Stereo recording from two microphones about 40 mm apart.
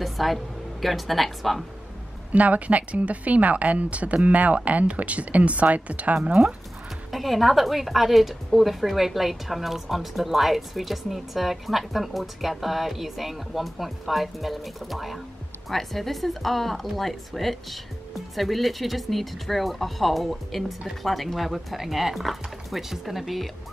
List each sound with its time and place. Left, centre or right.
0.0 s a woman's voice: centre
2.3 s a woman's voice: right
7.1 s a woman's voice: centre